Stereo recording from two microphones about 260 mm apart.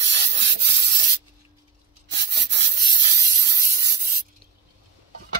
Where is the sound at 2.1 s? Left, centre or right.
Right.